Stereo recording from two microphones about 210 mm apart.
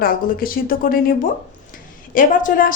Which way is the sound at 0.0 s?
45° left (ahead or behind).